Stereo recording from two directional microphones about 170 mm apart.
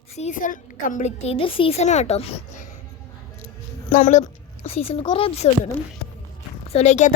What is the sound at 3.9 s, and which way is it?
A woman's voice, 45° left (ahead or behind).